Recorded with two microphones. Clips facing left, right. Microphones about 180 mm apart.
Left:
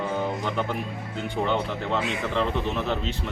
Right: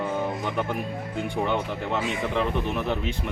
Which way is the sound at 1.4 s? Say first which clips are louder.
Left 2 dB; 10° right (ahead or behind).